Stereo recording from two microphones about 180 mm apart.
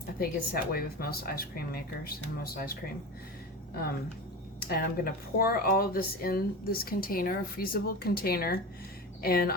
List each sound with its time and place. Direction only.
0.2 s speech: 55° left (ahead or behind)
4.7 s speech: 55° left (ahead or behind)